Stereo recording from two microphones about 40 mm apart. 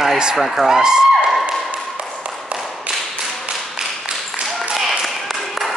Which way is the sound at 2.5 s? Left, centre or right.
Right.